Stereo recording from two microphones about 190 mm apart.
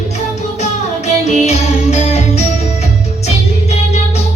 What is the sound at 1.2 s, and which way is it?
Music, 35° left (ahead or behind).